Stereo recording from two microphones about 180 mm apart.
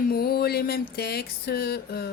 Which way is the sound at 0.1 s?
60° left (ahead or behind).